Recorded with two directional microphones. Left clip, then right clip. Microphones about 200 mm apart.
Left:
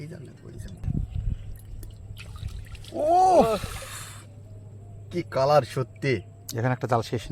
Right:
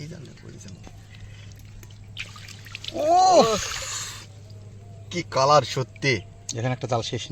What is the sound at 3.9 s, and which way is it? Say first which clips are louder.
Drip: right 8 dB; 30° right (ahead or behind).